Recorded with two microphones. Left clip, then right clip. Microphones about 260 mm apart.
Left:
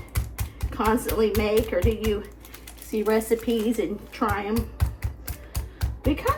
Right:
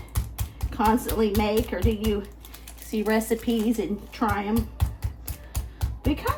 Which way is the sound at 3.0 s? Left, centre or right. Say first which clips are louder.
Left 2 dB; right.